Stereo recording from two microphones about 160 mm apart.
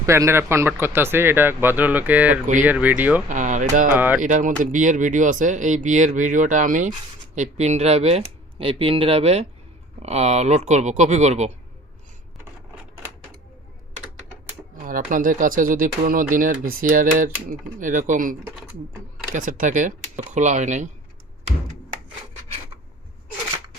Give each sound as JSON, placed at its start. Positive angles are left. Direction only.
{"t": 0.0, "sound": "speech", "side_deg": -20}
{"t": 3.2, "sound": "speech", "side_deg": -50}
{"t": 3.9, "sound": "speech", "side_deg": -10}
{"t": 4.2, "sound": "speech", "side_deg": -50}
{"t": 14.8, "sound": "speech", "side_deg": -60}